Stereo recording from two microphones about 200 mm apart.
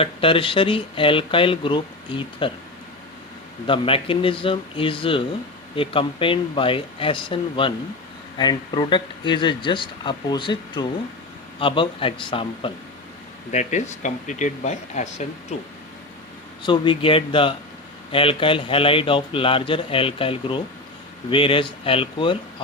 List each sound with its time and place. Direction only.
0.0 s speech: 25° left (ahead or behind)
3.7 s speech: 25° left (ahead or behind)
13.5 s speech: 35° left (ahead or behind)
16.6 s speech: 25° left (ahead or behind)